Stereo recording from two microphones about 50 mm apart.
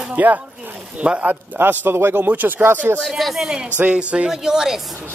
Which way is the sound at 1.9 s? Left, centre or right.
Right.